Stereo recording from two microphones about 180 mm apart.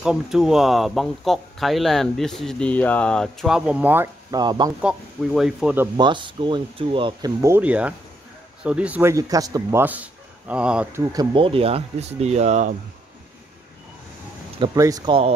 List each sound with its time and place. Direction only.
0.0 s speech: 5° right (ahead or behind)
4.4 s speech: 25° right (ahead or behind)
4.8 s speech: centre (ahead or behind)
5.9 s a man's voice: 25° right (ahead or behind)
14.6 s speech: 20° right (ahead or behind)